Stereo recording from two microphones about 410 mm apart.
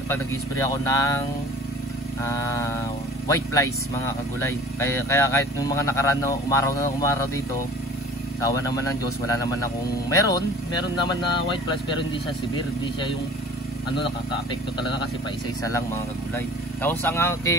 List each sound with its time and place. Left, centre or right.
0.7 s speech: centre
2.2 s speech: centre
15.6 s speech: centre